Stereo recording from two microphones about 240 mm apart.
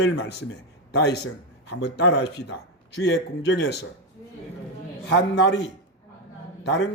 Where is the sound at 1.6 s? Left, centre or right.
Left.